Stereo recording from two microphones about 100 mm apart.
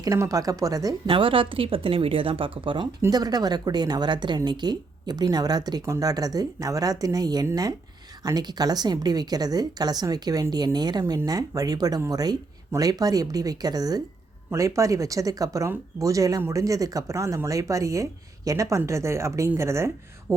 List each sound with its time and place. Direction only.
0.0 s speech: 35° right (ahead or behind)
1.0 s speech: 65° right (ahead or behind)
3.1 s a woman's voice: 40° right (ahead or behind)